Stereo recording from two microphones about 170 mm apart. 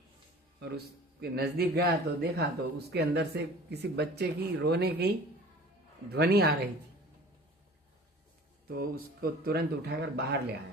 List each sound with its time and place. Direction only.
1.2 s speech: 70° right (ahead or behind)
8.6 s speech: 65° right (ahead or behind)